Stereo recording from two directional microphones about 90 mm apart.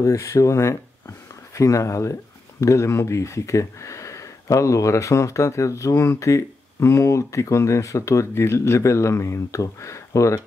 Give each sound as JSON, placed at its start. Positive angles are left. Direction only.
{"t": 0.0, "sound": "speech", "side_deg": 35}